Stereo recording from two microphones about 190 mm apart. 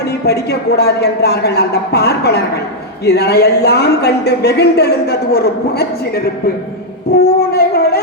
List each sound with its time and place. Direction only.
0.3 s speech: 60° left (ahead or behind)
7.1 s a sound: 55° left (ahead or behind)
7.5 s howl: 55° left (ahead or behind)